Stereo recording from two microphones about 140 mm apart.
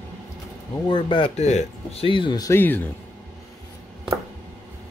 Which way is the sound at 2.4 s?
15° left (ahead or behind).